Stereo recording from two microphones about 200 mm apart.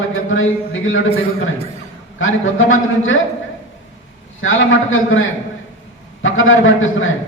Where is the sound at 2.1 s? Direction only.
80° left.